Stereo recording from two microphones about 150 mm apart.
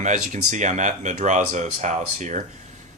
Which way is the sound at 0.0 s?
55° right (ahead or behind).